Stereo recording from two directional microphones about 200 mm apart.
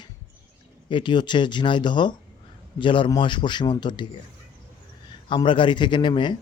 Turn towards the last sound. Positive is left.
turn(degrees=25)  # may be behind; listen again after turning